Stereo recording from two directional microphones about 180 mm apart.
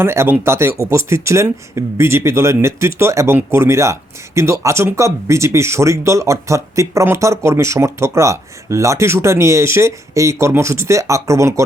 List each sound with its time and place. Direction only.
0.0 s speech: 15° right (ahead or behind)